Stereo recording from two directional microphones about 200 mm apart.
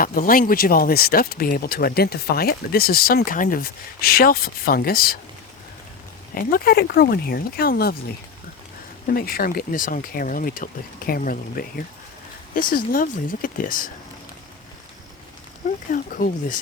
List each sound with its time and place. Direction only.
0.0 s speech: 45° left (ahead or behind)
6.3 s speech: 45° left (ahead or behind)
9.0 s speech: 45° left (ahead or behind)
12.7 s speech: 45° left (ahead or behind)
15.9 s speech: 45° left (ahead or behind)